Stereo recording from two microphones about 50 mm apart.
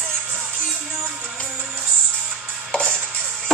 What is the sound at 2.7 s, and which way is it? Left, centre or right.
Music, centre.